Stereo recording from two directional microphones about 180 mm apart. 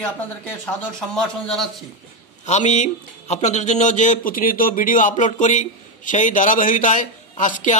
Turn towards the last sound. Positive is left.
turn(degrees=45)  # may be behind; listen again after turning